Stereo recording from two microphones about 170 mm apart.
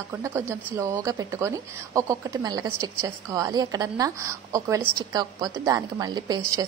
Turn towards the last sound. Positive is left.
turn(degrees=-20)  # may be behind; listen again after turning